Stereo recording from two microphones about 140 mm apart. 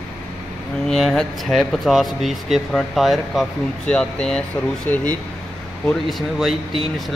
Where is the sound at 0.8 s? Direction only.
Centre (ahead or behind).